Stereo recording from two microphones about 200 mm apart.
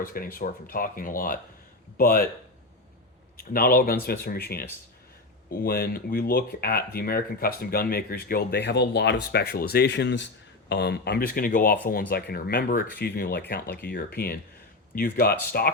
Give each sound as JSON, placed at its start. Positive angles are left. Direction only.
{"t": 0.0, "sound": "speech", "side_deg": 45}
{"t": 3.3, "sound": "speech", "side_deg": 45}